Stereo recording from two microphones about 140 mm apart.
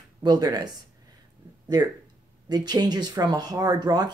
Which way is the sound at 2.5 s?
30° right (ahead or behind).